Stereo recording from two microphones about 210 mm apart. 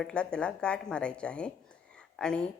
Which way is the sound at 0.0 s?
5° left (ahead or behind).